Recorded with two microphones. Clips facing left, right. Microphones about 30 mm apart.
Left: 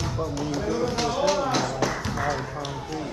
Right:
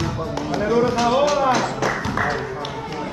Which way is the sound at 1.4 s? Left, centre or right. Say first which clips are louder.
Right 6 dB; right.